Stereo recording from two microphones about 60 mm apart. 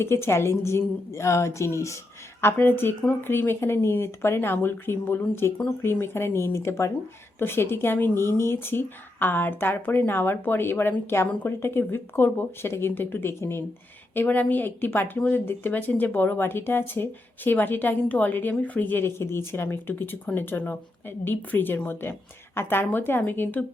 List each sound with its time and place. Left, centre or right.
0.0 s a woman's voice: left
2.4 s a woman's voice: left
14.3 s speech: left